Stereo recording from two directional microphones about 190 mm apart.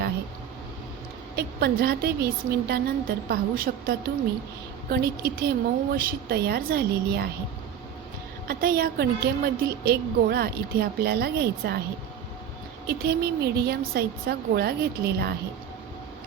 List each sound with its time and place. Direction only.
1.4 s a woman's voice: 55° right (ahead or behind)
8.4 s a woman's voice: 50° right (ahead or behind)
12.9 s a woman's voice: 55° right (ahead or behind)